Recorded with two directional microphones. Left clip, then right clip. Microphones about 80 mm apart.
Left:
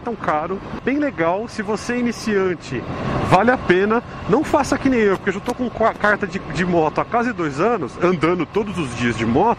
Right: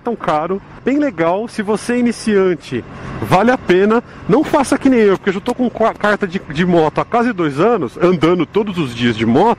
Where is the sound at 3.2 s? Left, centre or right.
Centre.